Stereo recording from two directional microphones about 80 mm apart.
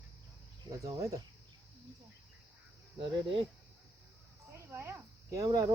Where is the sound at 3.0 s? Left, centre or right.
Right.